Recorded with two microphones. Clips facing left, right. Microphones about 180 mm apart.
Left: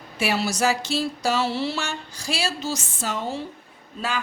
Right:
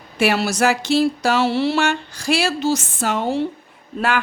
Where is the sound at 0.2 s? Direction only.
70° right (ahead or behind).